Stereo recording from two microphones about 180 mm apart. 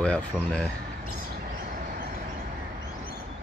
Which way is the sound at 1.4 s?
50° right (ahead or behind).